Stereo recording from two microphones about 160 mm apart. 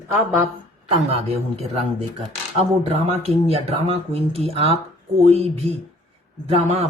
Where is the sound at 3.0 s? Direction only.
40° right (ahead or behind).